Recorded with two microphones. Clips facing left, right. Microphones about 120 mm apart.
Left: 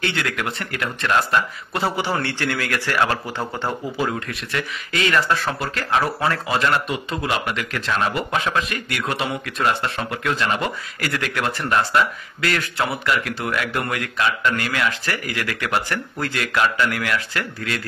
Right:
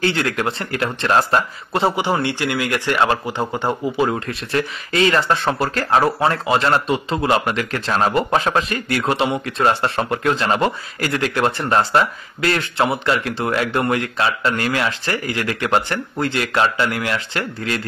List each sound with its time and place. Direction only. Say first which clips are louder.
0.0 s speech: right 5 dB; 30° right (ahead or behind)
4.1 s speech: right 5 dB; 30° right (ahead or behind)